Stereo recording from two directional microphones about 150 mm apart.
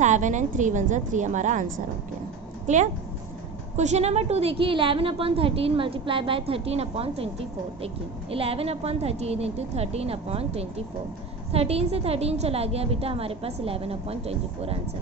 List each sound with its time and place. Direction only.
0.0 s a woman's voice: 55° right (ahead or behind)